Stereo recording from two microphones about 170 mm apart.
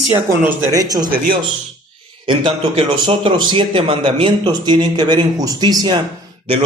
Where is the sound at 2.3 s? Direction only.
30° right (ahead or behind).